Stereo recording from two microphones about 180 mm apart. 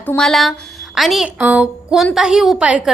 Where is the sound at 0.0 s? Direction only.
5° left (ahead or behind).